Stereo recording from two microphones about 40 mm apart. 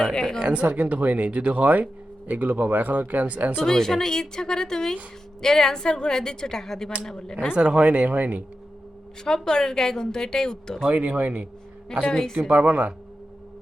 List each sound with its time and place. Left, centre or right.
0.0 s a woman's voice: centre
0.4 s speech: right
3.6 s a woman's voice: centre
7.5 s speech: right
9.2 s a woman's voice: centre
10.8 s speech: right
12.5 s speech: right